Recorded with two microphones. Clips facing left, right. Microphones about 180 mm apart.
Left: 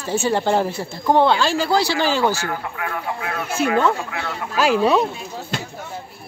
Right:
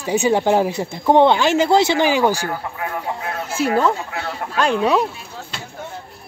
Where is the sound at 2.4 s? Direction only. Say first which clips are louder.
Right 1 dB; 30° right (ahead or behind).